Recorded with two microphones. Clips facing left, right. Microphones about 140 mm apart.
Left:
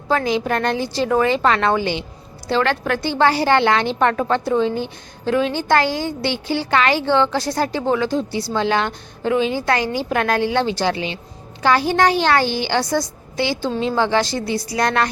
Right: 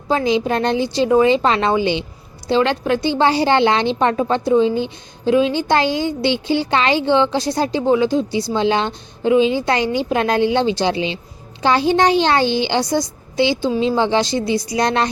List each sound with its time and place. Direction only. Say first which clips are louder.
0.1 s a woman's voice: right 2 dB; 20° right (ahead or behind)